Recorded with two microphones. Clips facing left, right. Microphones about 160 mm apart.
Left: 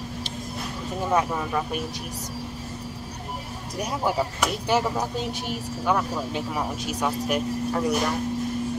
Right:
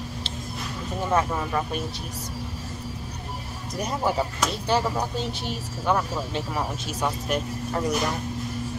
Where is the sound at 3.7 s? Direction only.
10° left (ahead or behind).